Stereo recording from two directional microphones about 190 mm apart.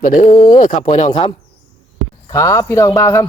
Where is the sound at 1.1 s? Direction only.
25° left (ahead or behind).